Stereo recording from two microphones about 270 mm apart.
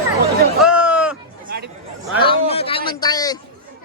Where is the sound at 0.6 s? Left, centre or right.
Centre.